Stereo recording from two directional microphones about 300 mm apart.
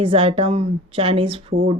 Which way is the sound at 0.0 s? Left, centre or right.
Centre.